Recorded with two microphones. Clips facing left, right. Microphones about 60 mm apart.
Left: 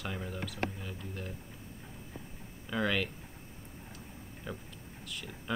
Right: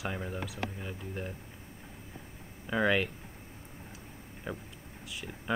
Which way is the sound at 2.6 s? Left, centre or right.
Centre.